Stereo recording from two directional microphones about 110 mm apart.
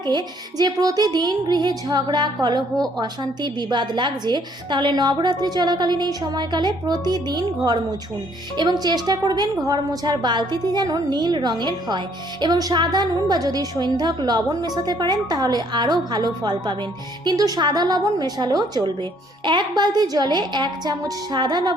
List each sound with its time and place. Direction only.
0.0 s a woman's voice: 40° right (ahead or behind)